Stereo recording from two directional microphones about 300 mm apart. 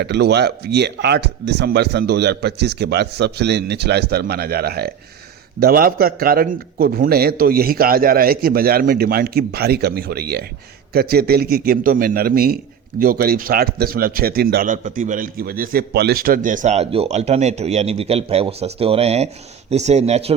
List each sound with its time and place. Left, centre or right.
0.0 s speech: right